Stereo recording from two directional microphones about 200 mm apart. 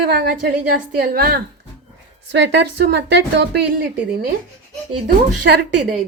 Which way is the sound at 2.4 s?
60° right (ahead or behind).